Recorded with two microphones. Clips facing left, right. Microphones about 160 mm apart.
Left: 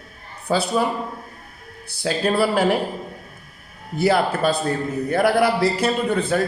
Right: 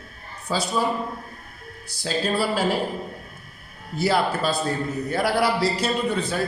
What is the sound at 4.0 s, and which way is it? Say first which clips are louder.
A man's voice: left 3 dB; 55° left (ahead or behind).